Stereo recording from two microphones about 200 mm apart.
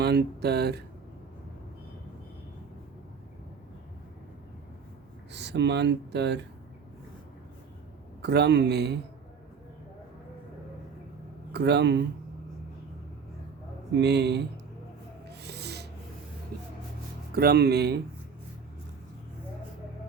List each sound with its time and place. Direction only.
0.0 s speech: 55° right (ahead or behind)
5.3 s speech: 60° right (ahead or behind)
8.2 s speech: 55° right (ahead or behind)
11.5 s speech: 55° right (ahead or behind)
14.0 s speech: 55° right (ahead or behind)
15.3 s rub: 55° right (ahead or behind)
16.5 s a sound: 50° right (ahead or behind)
17.3 s speech: 50° right (ahead or behind)